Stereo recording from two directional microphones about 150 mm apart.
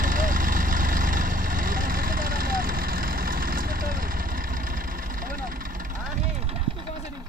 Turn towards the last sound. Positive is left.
turn(degrees=-50)  # may be behind; listen again after turning